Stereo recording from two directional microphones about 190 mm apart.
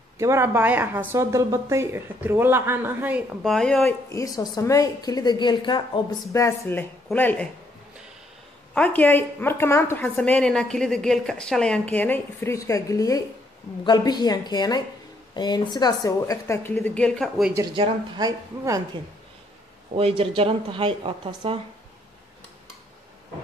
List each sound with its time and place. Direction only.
0.2 s speech: 15° right (ahead or behind)
3.4 s speech: centre (ahead or behind)
4.1 s a woman's voice: 20° left (ahead or behind)
8.7 s a woman's voice: 5° left (ahead or behind)
17.7 s speech: 25° right (ahead or behind)
20.0 s speech: 30° right (ahead or behind)